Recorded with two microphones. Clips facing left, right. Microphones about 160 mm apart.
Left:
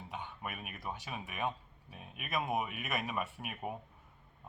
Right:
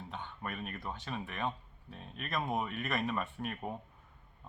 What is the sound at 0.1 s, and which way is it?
Speech, 10° left (ahead or behind).